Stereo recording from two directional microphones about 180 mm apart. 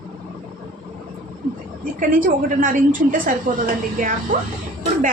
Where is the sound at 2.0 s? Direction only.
50° right (ahead or behind).